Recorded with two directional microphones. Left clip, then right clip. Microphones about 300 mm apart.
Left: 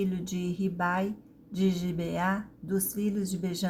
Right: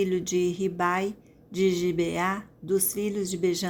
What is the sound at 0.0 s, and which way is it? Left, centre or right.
A woman's voice, right.